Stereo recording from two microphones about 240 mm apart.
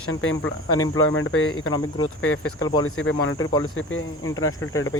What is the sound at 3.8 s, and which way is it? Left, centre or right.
Speech, left.